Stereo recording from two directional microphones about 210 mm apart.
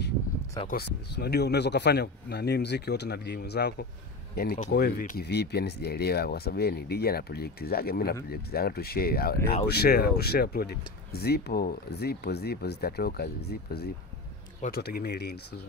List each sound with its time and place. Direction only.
0.7 s speech: 50° left (ahead or behind)